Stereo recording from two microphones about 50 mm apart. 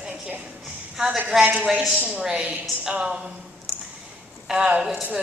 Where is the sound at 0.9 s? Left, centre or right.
Centre.